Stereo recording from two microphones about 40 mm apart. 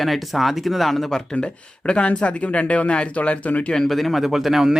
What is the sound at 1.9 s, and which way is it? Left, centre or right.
Speech, left.